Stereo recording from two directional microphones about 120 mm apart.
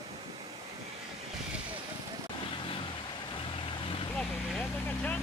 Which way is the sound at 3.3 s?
50° left (ahead or behind).